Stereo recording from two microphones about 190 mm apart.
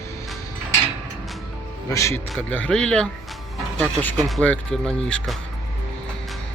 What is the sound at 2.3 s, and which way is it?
Speech, 5° left (ahead or behind).